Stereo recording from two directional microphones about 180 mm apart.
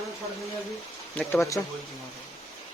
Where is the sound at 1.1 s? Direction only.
10° left (ahead or behind).